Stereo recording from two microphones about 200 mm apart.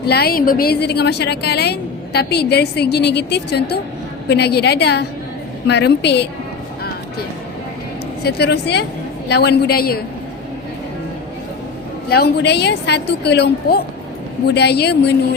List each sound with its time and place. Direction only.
0.1 s a woman's voice: 50° left (ahead or behind)
8.2 s a woman's voice: 55° left (ahead or behind)
12.1 s a woman's voice: 55° left (ahead or behind)